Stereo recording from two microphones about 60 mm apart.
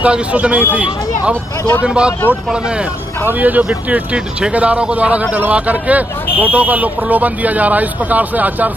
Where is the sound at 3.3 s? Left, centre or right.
Right.